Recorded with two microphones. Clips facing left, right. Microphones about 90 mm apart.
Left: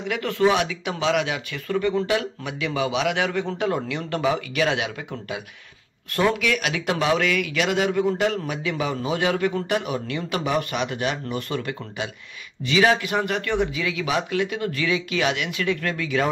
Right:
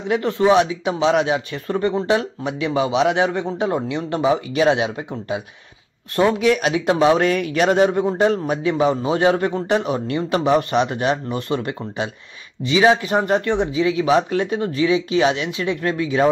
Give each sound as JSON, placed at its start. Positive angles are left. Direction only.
{"t": 0.1, "sound": "a man's voice", "side_deg": -25}